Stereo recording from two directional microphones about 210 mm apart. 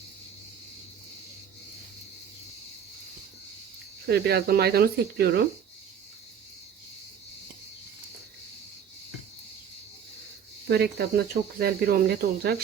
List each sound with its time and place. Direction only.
4.0 s speech: 50° right (ahead or behind)
10.7 s speech: 50° right (ahead or behind)